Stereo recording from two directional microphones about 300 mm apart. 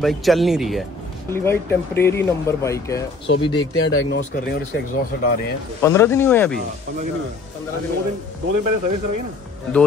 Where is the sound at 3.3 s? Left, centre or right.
Left.